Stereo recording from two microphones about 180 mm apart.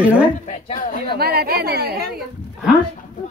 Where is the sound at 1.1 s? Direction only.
60° right (ahead or behind).